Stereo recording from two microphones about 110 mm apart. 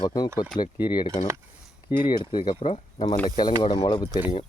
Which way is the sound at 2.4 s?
65° left (ahead or behind).